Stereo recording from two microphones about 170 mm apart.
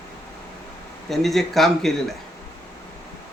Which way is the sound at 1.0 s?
Centre (ahead or behind).